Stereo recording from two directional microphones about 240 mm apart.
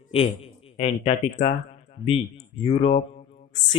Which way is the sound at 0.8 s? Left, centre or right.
Left.